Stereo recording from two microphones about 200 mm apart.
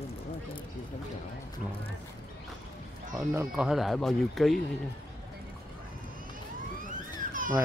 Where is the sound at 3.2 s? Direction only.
10° right (ahead or behind).